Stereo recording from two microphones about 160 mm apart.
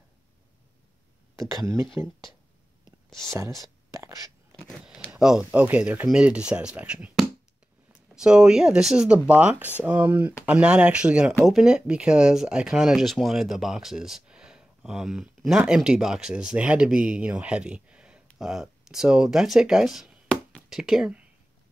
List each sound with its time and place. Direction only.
2.0 s speech: 15° right (ahead or behind)
3.1 s speech: 5° left (ahead or behind)
4.6 s a sound: centre (ahead or behind)
5.1 s speech: 5° right (ahead or behind)